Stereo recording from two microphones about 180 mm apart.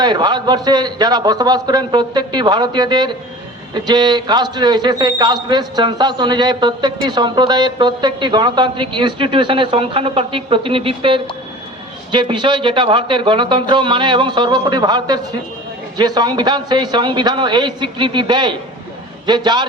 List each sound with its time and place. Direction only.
0.0 s a man's voice: 25° right (ahead or behind)